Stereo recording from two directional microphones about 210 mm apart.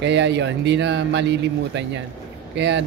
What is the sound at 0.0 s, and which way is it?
A man's voice, 55° right (ahead or behind).